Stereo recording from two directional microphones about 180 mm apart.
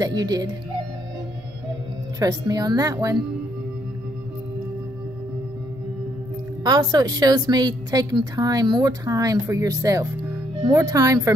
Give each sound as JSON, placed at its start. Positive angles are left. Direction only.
{"t": 0.0, "sound": "a woman's voice", "side_deg": -20}
{"t": 2.1, "sound": "a woman's voice", "side_deg": -20}
{"t": 6.6, "sound": "a woman's voice", "side_deg": -20}